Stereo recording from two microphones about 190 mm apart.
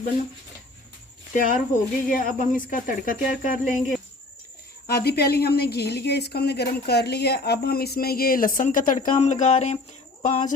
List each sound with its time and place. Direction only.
1.4 s a woman's voice: 45° left (ahead or behind)